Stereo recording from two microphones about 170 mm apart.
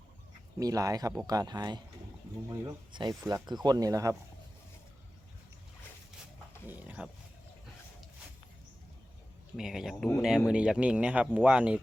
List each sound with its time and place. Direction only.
0.6 s speech: 20° right (ahead or behind)
6.7 s a sound: 10° right (ahead or behind)
9.6 s speech: centre (ahead or behind)